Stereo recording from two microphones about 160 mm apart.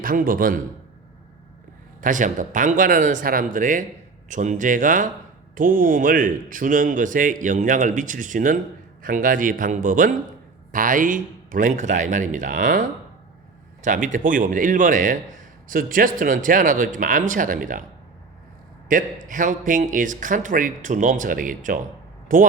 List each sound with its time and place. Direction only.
0.0 s a man's voice: 60° right (ahead or behind)
2.0 s a man's voice: 55° right (ahead or behind)
18.9 s a man's voice: 55° right (ahead or behind)